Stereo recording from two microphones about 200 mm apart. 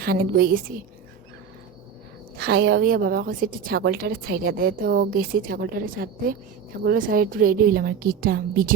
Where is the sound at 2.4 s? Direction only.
55° right (ahead or behind).